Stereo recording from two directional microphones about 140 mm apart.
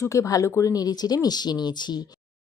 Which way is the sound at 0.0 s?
20° left (ahead or behind).